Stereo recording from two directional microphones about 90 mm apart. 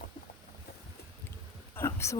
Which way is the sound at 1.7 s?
30° left (ahead or behind).